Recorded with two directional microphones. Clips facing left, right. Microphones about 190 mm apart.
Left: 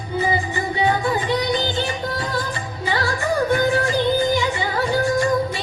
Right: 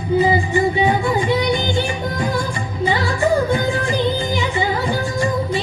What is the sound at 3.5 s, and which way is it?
Music, 20° right (ahead or behind).